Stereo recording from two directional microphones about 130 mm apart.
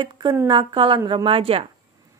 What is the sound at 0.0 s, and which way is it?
A woman's voice, 35° right (ahead or behind).